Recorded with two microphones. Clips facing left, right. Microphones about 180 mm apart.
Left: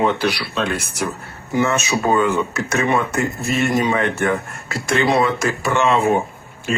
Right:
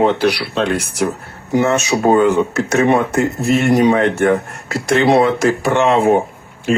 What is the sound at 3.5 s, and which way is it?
Speech, 60° right (ahead or behind).